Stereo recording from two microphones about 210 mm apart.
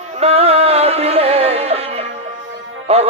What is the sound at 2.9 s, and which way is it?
Music, 30° right (ahead or behind).